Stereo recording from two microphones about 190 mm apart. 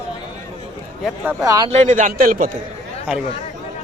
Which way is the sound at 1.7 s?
40° right (ahead or behind).